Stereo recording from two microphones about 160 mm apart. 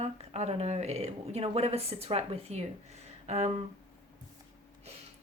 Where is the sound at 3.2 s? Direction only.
40° right (ahead or behind).